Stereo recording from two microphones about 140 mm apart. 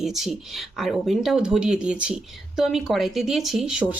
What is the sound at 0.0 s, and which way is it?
Speech, centre (ahead or behind).